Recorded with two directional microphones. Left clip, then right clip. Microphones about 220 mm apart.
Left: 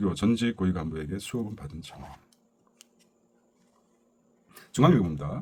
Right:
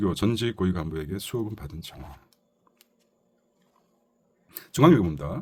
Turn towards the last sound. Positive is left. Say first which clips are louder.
# right 5 dB
turn(degrees=-50)  # may be behind; listen again after turning